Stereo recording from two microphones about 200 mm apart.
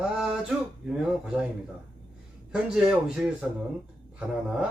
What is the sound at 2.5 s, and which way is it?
Speech, 5° right (ahead or behind).